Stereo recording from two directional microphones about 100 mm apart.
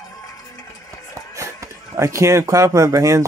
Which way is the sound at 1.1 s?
30° right (ahead or behind).